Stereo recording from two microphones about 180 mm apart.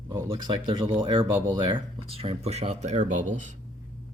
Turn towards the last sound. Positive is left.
turn(degrees=-45)  # may be behind; listen again after turning